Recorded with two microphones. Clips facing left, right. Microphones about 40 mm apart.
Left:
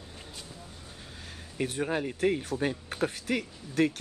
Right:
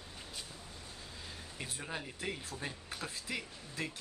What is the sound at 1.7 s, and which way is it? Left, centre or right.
Speech, left.